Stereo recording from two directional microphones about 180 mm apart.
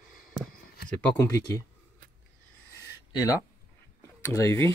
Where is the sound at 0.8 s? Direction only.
5° left (ahead or behind).